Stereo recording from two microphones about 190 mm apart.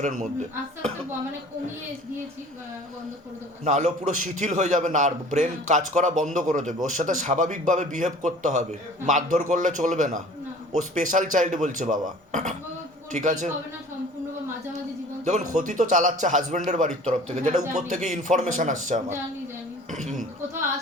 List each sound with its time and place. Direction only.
3.6 s a man's voice: 40° right (ahead or behind)
15.2 s a man's voice: 40° right (ahead or behind)